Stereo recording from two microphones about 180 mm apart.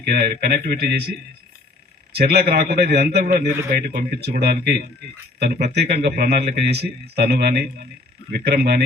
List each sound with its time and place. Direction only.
0.1 s speech: 60° right (ahead or behind)
2.1 s speech: 60° right (ahead or behind)